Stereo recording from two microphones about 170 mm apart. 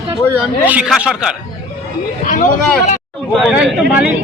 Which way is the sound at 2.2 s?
50° left (ahead or behind).